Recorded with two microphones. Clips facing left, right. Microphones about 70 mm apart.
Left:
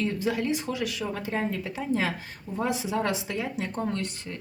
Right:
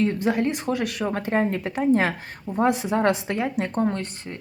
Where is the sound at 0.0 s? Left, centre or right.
Right.